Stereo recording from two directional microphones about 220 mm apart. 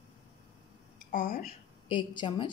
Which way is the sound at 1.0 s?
35° left (ahead or behind).